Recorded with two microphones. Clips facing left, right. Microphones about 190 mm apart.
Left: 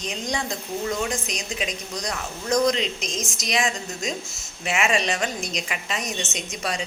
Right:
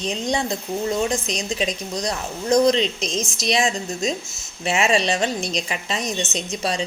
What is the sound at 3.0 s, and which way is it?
Speech, 10° left (ahead or behind).